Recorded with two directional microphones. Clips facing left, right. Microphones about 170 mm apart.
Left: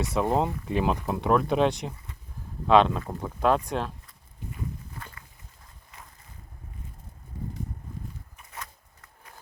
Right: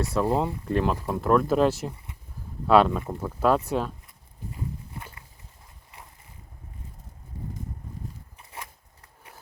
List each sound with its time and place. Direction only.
0.0 s speech: centre (ahead or behind)
0.3 s speech: 25° left (ahead or behind)
0.6 s speech: centre (ahead or behind)
8.4 s a sound: 25° right (ahead or behind)